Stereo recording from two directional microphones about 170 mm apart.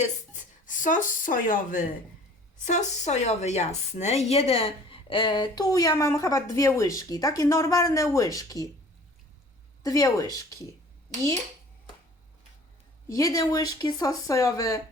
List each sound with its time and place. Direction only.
0.6 s a woman's voice: 50° left (ahead or behind); by 8.6 s 20° left (ahead or behind)
9.8 s a woman's voice: 20° left (ahead or behind)
13.1 s a woman's voice: 20° left (ahead or behind)